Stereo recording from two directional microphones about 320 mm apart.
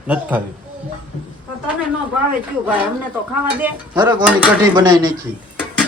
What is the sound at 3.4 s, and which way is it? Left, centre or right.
Speech, centre.